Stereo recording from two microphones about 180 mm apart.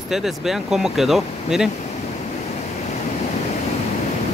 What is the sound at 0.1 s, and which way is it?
Speech, centre (ahead or behind).